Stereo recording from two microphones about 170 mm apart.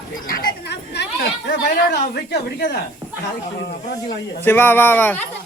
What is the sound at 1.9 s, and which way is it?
Speech, 85° left.